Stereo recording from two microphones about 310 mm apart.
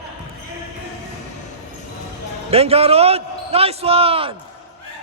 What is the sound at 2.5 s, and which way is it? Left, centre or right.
A man's voice, centre.